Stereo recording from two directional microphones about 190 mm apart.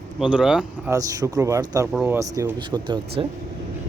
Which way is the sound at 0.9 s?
15° right (ahead or behind).